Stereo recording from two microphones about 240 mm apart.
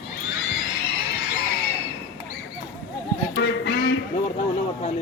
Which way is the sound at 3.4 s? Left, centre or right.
Left.